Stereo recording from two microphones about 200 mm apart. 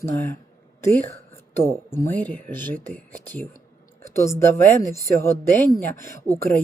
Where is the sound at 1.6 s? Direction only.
10° left (ahead or behind).